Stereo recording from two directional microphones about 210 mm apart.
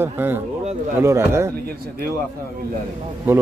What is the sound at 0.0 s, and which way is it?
Speech, 10° right (ahead or behind).